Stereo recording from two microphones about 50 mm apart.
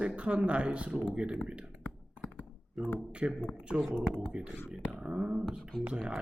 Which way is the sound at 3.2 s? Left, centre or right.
Right.